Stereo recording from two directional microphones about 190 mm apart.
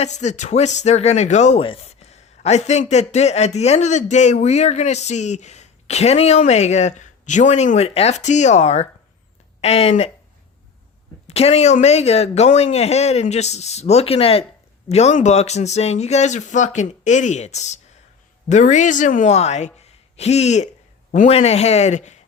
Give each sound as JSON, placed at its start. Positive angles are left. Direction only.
{"t": 0.0, "sound": "speech", "side_deg": 35}
{"t": 11.3, "sound": "speech", "side_deg": 35}